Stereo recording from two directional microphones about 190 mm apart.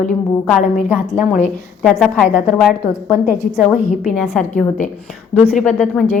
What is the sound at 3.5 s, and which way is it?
A woman's voice, centre (ahead or behind).